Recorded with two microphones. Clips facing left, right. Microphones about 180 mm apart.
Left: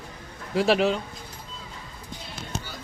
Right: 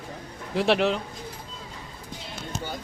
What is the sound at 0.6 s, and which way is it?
Speech, centre (ahead or behind).